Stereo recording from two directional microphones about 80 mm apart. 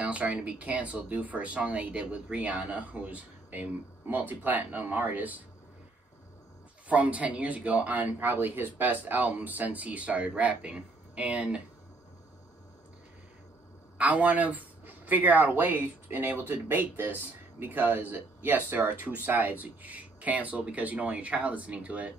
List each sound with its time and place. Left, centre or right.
0.0 s speech: centre
6.9 s speech: centre
13.9 s speech: centre